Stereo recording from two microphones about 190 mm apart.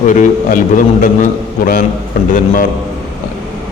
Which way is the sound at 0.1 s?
40° left (ahead or behind).